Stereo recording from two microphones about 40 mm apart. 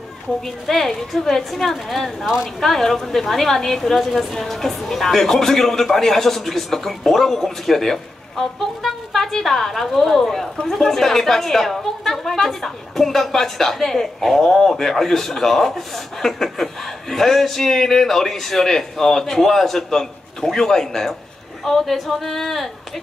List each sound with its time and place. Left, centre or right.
0.7 s a woman's voice: centre
2.2 s speech: centre
2.6 s a woman's voice: centre